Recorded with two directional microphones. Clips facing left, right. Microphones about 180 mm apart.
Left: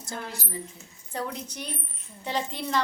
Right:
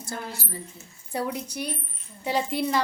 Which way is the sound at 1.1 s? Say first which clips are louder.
Right 4 dB; 10° right (ahead or behind).